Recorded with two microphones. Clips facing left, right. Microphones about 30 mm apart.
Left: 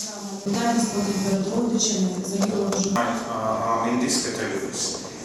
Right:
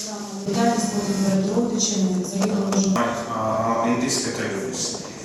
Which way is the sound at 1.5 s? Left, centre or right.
Centre.